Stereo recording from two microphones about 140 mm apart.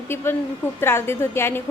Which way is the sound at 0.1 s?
15° left (ahead or behind).